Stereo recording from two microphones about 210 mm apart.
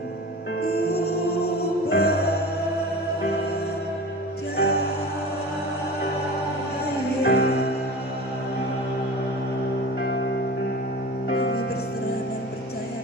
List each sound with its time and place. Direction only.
0.6 s music: 50° left (ahead or behind)
4.5 s music: 50° left (ahead or behind)
7.2 s music: 50° left (ahead or behind)
11.3 s music: 45° left (ahead or behind)